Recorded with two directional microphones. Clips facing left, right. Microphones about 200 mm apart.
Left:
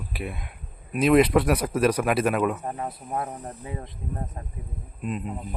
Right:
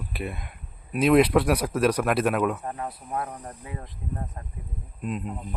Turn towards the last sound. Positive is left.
turn(degrees=0)  # may be behind; listen again after turning